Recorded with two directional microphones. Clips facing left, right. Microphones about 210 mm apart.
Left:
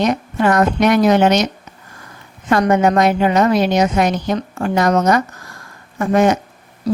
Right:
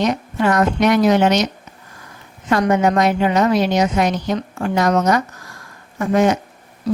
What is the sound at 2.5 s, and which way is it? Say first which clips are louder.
A woman's voice: left 2 dB; 50° left (ahead or behind).